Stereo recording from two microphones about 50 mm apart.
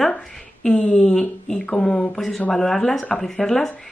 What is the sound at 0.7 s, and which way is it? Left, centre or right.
Speech, centre.